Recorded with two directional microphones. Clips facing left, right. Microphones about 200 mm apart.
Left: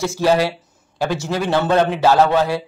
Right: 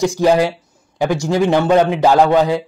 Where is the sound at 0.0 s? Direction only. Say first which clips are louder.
Right 3 dB; 15° right (ahead or behind).